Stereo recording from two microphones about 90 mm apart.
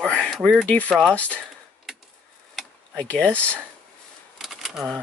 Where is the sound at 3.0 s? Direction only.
15° left (ahead or behind).